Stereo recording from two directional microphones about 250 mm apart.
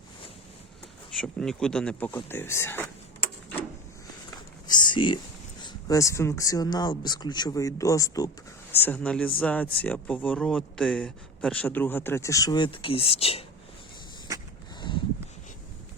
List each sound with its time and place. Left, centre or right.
1.2 s a man's voice: centre
4.3 s a man's voice: centre
14.8 s a sound: centre